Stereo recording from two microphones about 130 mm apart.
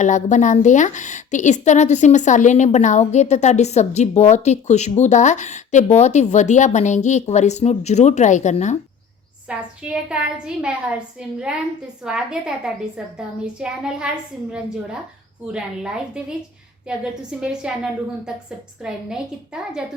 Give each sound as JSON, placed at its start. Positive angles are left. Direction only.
{"t": 0.0, "sound": "a woman's voice", "side_deg": 70}
{"t": 9.5, "sound": "a woman's voice", "side_deg": -10}
{"t": 17.4, "sound": "a woman's voice", "side_deg": -5}
{"t": 18.8, "sound": "a woman's voice", "side_deg": -5}